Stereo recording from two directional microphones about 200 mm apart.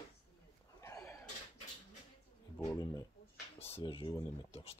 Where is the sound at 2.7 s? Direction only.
20° left (ahead or behind).